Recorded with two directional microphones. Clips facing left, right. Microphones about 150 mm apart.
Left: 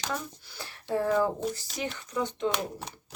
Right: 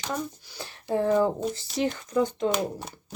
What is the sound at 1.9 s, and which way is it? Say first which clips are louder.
Speech: right 6 dB; 40° right (ahead or behind).